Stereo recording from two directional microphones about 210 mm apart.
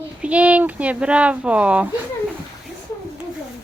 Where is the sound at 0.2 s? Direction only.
5° right (ahead or behind).